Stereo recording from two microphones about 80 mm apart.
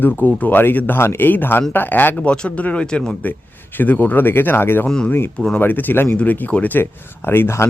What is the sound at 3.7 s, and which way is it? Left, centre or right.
Speech, left.